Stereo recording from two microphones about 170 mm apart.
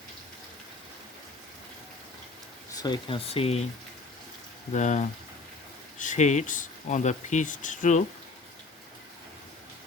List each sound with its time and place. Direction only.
2.7 s speech: 25° left (ahead or behind)
4.7 s speech: 45° left (ahead or behind)